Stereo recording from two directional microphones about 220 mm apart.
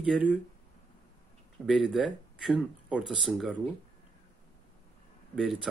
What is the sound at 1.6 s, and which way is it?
A man's voice, centre (ahead or behind).